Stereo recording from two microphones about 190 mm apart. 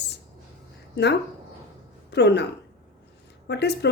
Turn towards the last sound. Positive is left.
turn(degrees=60)  # may be behind; listen again after turning